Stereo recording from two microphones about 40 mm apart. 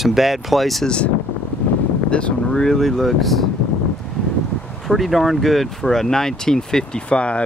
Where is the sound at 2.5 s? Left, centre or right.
Centre.